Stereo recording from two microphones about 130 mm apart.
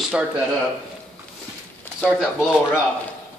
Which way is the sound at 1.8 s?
10° left (ahead or behind).